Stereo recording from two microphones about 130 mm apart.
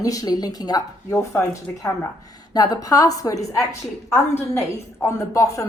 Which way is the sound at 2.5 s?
30° left (ahead or behind).